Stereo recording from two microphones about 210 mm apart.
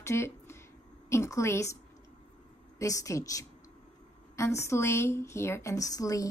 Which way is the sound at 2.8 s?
15° left (ahead or behind).